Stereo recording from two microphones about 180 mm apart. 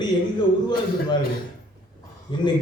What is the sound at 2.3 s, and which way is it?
Speech, 25° left (ahead or behind).